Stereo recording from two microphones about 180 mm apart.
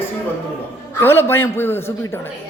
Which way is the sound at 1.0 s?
15° left (ahead or behind).